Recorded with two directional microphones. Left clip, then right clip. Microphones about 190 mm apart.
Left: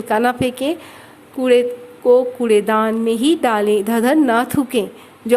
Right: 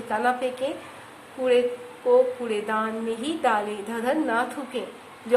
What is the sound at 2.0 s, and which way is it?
A woman's voice, 50° left (ahead or behind).